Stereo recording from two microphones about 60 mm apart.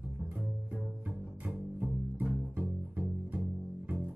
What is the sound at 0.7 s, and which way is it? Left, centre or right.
Music, right.